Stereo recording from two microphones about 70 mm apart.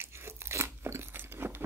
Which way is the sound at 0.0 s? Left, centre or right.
Right.